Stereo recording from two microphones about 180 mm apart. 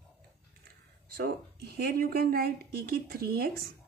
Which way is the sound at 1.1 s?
60° right (ahead or behind).